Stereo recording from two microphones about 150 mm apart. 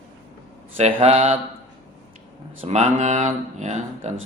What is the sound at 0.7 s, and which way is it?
Speech, 45° right (ahead or behind).